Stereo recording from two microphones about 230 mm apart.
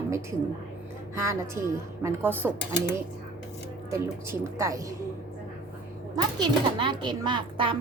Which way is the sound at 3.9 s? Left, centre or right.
Centre.